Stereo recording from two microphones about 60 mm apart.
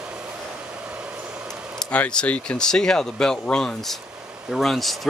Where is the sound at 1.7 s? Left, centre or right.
Centre.